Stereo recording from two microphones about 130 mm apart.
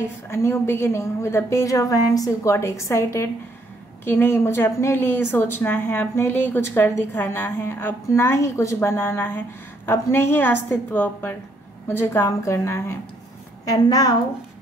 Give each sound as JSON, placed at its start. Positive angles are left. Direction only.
{"t": 0.3, "sound": "a woman's voice", "side_deg": 20}